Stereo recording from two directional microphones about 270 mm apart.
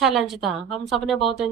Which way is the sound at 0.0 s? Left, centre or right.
Centre.